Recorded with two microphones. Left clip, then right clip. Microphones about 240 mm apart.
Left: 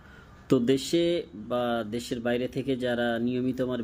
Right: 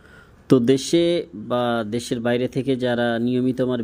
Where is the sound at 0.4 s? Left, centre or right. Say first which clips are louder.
Right 7 dB; right.